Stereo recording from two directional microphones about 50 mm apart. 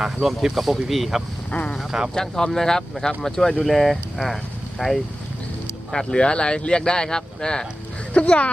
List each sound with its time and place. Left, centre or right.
0.0 s speech: centre
1.5 s speech: left
1.8 s speech: centre
2.1 s speech: centre
5.9 s speech: centre
8.1 s speech: left